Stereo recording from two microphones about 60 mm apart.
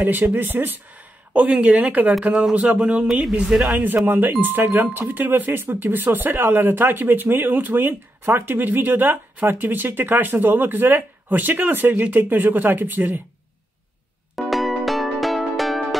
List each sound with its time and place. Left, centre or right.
0.0 s speech: right
1.3 s speech: right
3.7 s speech: right
14.3 s music: centre